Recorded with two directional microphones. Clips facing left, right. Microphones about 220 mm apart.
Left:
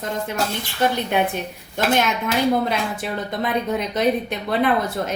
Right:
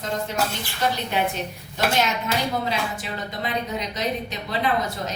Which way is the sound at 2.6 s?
55° left (ahead or behind).